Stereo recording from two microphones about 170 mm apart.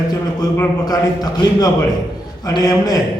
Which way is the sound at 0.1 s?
20° left (ahead or behind).